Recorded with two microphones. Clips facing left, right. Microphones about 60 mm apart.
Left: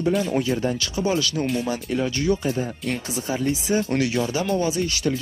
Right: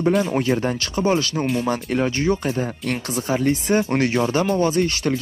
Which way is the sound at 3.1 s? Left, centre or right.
Right.